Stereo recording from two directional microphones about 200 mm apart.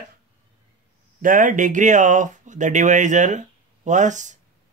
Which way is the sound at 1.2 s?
40° right (ahead or behind).